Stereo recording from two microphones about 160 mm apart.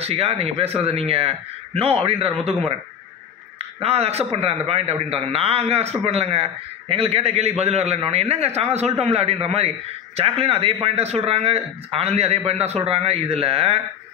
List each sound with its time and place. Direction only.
0.0 s a man's voice: 40° right (ahead or behind)
3.5 s a man's voice: 40° right (ahead or behind)